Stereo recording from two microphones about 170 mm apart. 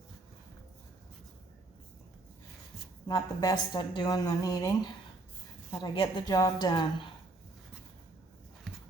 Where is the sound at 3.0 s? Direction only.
25° left (ahead or behind).